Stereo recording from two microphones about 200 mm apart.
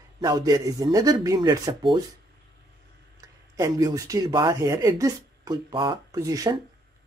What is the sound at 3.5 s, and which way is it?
Speech, 15° right (ahead or behind).